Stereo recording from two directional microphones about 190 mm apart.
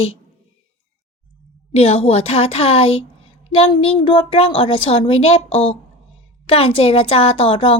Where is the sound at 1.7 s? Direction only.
30° left (ahead or behind).